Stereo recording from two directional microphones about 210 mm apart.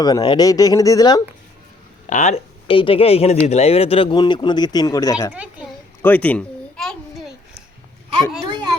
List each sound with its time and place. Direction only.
0.0 s speech: 20° left (ahead or behind)
2.0 s speech: 35° left (ahead or behind); by 5.3 s 15° left (ahead or behind)
6.0 s a sound: 10° left (ahead or behind)
8.4 s children playing: 20° right (ahead or behind)